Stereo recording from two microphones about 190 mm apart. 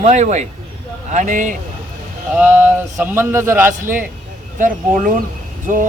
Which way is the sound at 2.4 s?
10° right (ahead or behind).